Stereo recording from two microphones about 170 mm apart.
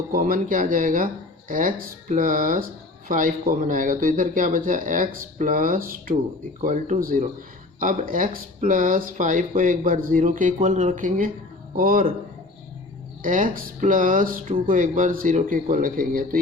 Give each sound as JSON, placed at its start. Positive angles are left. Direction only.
{"t": 0.1, "sound": "speech", "side_deg": -55}
{"t": 13.2, "sound": "speech", "side_deg": -50}